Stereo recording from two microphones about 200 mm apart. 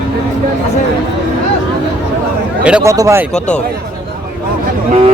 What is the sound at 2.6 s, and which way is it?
Speech, 5° right (ahead or behind).